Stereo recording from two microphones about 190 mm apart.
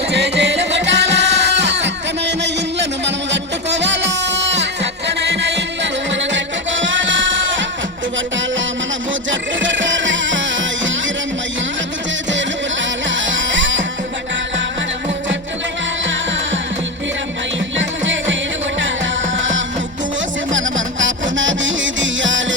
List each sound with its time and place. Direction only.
0.1 s music: 65° right (ahead or behind)
9.3 s music: 80° right
13.1 s music: 80° right
17.7 s music: 80° right
19.4 s music: 80° right